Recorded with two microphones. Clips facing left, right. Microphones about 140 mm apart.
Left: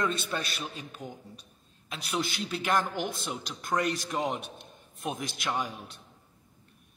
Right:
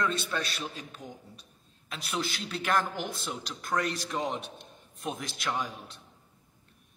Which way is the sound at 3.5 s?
20° left (ahead or behind).